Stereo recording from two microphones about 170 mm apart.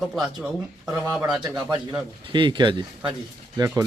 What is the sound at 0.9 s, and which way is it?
Speech, 20° right (ahead or behind).